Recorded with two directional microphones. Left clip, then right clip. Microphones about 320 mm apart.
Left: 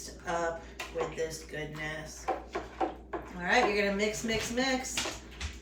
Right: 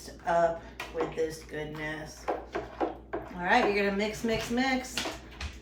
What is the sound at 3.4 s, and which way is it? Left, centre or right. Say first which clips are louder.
Speech: right 2 dB; centre.